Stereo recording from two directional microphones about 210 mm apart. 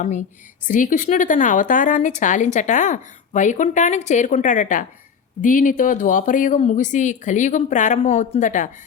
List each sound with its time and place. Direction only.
0.0 s a woman's voice: 35° left (ahead or behind)